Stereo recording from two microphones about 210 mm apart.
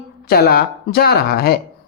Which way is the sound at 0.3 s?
45° left (ahead or behind).